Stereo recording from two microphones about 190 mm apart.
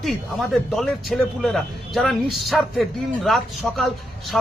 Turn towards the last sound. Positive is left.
turn(degrees=0)  # may be behind; listen again after turning